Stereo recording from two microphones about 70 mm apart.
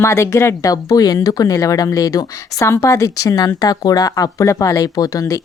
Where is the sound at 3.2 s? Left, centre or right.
Left.